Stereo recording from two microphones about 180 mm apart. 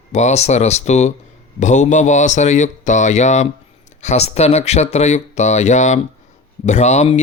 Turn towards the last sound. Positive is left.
turn(degrees=40)  # may be behind; listen again after turning